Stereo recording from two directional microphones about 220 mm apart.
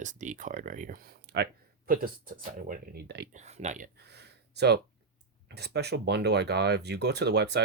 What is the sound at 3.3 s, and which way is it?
Speech, 30° right (ahead or behind).